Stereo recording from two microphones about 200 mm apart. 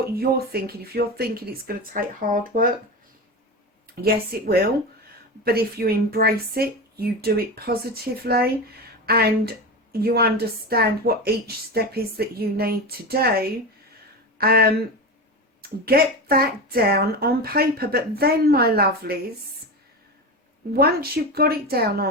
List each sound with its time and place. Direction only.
0.0 s speech: 50° right (ahead or behind)
3.9 s speech: 50° right (ahead or behind)
20.7 s speech: 50° right (ahead or behind)